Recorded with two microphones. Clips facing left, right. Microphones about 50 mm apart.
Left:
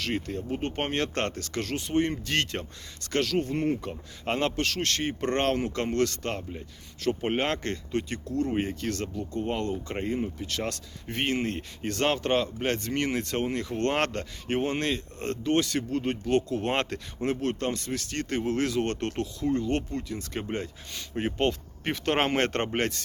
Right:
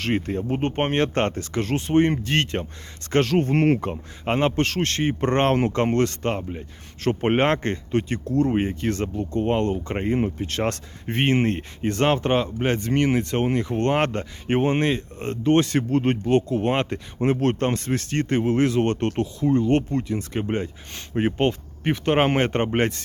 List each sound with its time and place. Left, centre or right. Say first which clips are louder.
0.0 s speech: right 6 dB; right
3.5 s speech: right 8 dB; right
4.3 s speech: right 6 dB; right
4.5 s speech: right 5 dB; right
7.0 s speech: right 7 dB; right; by 12.9 s centre
12.9 s speech: right 7 dB; right
15.5 s speech: right 7 dB; right
16.2 s speech: right 5 dB; right
16.7 s speech: right 4 dB; centre
17.2 s speech: right 7 dB; right